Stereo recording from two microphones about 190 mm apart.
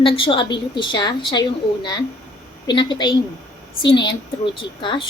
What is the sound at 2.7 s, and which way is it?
A woman's voice, 25° left (ahead or behind).